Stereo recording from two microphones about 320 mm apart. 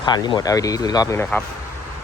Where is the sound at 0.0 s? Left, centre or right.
Centre.